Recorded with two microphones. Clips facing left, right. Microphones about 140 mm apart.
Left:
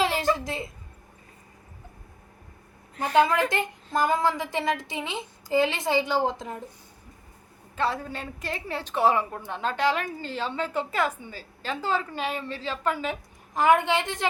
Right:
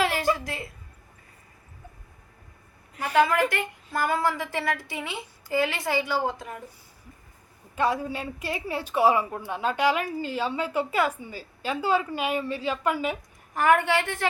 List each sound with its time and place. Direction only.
0.0 s a sound: 20° left (ahead or behind)
3.2 s a woman's voice: 20° left (ahead or behind)
7.8 s a woman's voice: 10° right (ahead or behind)
13.5 s a woman's voice: 15° left (ahead or behind)